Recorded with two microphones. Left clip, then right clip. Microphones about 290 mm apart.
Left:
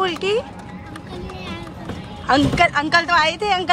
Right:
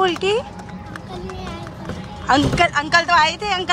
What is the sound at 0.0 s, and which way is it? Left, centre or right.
Run, centre.